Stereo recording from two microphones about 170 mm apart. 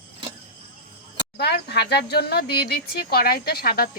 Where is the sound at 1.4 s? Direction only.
70° left (ahead or behind).